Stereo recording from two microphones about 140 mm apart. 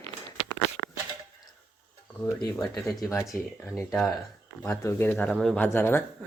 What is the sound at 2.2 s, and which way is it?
Speech, 25° left (ahead or behind).